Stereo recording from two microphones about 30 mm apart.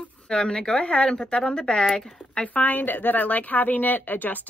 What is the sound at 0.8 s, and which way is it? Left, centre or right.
Speech, left.